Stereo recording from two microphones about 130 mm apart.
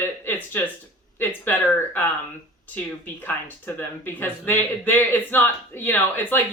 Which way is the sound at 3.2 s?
15° left (ahead or behind).